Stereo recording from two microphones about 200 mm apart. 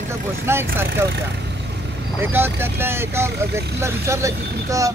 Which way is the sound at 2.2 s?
10° right (ahead or behind).